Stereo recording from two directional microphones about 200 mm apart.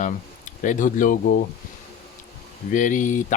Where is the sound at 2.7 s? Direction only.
40° left (ahead or behind).